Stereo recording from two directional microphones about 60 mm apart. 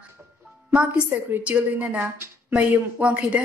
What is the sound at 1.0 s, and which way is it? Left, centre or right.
Speech, right.